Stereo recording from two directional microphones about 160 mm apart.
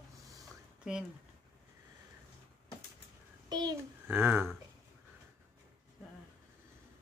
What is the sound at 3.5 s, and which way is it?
Speech, 25° right (ahead or behind).